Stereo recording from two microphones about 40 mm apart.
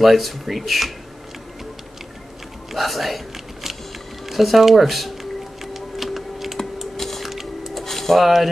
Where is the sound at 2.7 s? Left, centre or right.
Centre.